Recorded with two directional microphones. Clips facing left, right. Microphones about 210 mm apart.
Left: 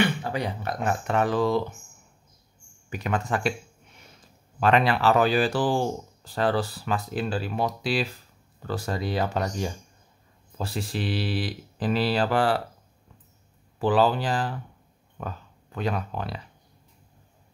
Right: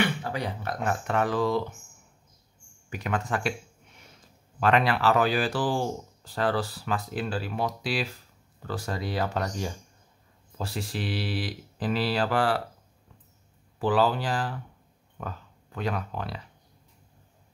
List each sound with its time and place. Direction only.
0.2 s speech: 20° left (ahead or behind)
2.9 s speech: 30° left (ahead or behind)
4.6 s speech: 25° left (ahead or behind)
13.7 s speech: 25° left (ahead or behind)